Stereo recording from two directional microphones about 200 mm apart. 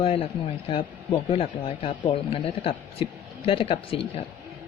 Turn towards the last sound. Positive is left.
turn(degrees=30)  # may be behind; listen again after turning